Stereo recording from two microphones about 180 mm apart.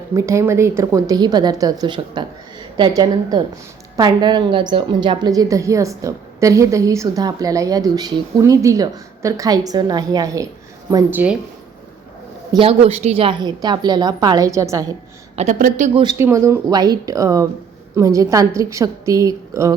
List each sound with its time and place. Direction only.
0.1 s a woman's voice: 15° right (ahead or behind)
12.5 s a woman's voice: 30° right (ahead or behind)
15.4 s a woman's voice: 45° right (ahead or behind)
16.1 s a woman's voice: 15° right (ahead or behind)